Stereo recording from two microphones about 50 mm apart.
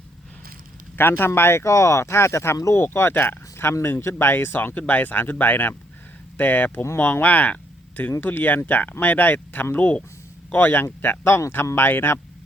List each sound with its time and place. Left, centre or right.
0.9 s speech: left
1.4 s speech: left
4.7 s speech: left
11.2 s speech: left
11.5 s speech: left